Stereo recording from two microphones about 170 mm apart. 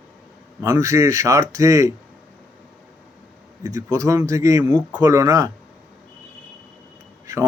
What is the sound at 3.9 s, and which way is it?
A man's voice, 20° right (ahead or behind).